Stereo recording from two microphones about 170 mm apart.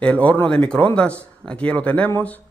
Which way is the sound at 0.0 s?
10° left (ahead or behind).